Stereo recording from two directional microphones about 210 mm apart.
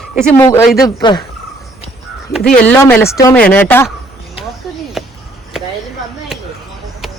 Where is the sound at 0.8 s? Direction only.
20° left (ahead or behind).